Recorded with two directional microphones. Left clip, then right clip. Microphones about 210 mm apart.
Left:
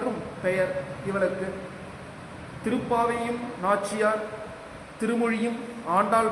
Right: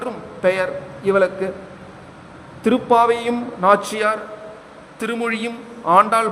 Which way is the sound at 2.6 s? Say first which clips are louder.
Right 11 dB; 55° right (ahead or behind).